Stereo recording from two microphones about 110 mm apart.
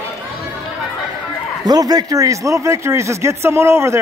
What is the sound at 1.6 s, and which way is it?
A man's voice, 35° right (ahead or behind).